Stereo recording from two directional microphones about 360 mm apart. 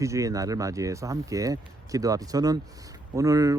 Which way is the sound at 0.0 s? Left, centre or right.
Centre.